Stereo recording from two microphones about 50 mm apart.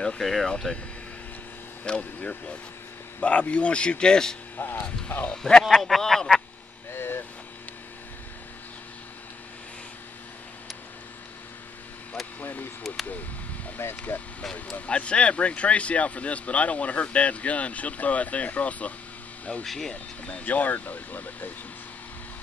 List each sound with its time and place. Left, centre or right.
0.2 s speech: centre
1.9 s speech: left
4.6 s speech: left
4.8 s speech: left
5.3 s speech: centre
6.9 s a sound: left
12.4 s speech: left
13.7 s speech: left
14.4 s speech: centre
19.6 s speech: centre
19.9 s speech: left